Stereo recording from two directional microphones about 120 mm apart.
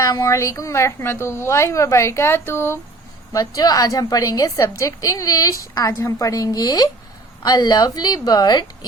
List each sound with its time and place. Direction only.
0.0 s a woman's voice: 30° left (ahead or behind)
3.3 s a woman's voice: 30° left (ahead or behind)